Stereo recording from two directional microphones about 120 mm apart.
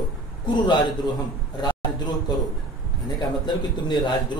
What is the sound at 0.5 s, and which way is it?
Speech, 40° left (ahead or behind).